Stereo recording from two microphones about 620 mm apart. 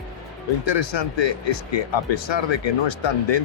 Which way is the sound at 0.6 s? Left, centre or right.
Left.